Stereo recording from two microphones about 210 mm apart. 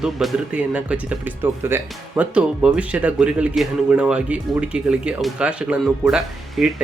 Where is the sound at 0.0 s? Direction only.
Centre (ahead or behind).